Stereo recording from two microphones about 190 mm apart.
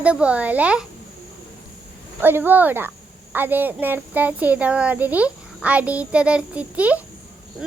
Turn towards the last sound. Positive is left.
turn(degrees=-5)  # may be behind; listen again after turning